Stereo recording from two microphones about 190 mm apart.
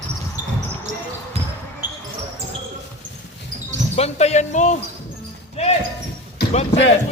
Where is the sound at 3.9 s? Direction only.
35° left (ahead or behind).